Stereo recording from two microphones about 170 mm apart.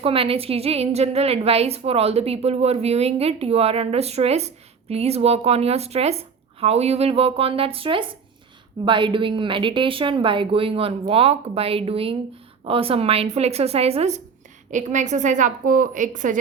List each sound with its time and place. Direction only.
0.0 s a woman's voice: 35° right (ahead or behind); by 16.4 s 50° right (ahead or behind)